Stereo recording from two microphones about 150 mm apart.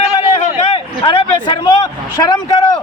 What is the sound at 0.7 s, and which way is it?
A man's voice, 35° left (ahead or behind).